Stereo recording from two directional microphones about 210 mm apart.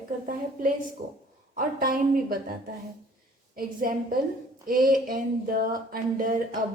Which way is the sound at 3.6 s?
45° right (ahead or behind).